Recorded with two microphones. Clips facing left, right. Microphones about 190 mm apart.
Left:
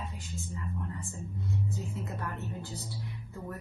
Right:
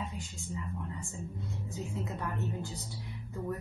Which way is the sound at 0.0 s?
15° right (ahead or behind).